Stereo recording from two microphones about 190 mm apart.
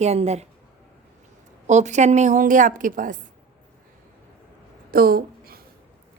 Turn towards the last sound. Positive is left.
turn(degrees=-50)  # may be behind; listen again after turning